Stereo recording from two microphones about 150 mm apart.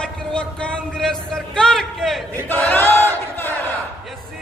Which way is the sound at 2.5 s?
15° left (ahead or behind).